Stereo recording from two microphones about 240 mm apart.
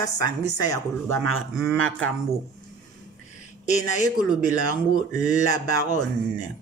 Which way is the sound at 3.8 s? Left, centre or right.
Centre.